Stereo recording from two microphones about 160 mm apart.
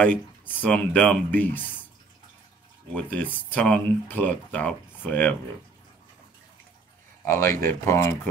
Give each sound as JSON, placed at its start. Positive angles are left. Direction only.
{"t": 0.0, "sound": "speech", "side_deg": 10}
{"t": 2.9, "sound": "speech", "side_deg": 10}
{"t": 7.2, "sound": "speech", "side_deg": 15}